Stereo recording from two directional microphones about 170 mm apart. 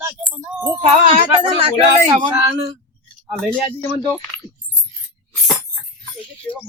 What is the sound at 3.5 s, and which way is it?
Speech, 10° left (ahead or behind).